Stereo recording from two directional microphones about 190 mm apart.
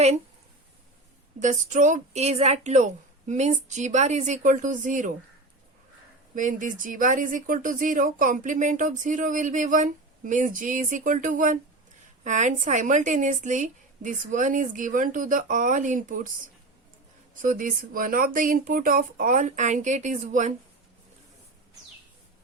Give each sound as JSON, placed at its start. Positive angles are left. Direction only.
{"t": 1.4, "sound": "a woman's voice", "side_deg": -40}
{"t": 6.3, "sound": "speech", "side_deg": -45}
{"t": 17.4, "sound": "speech", "side_deg": -45}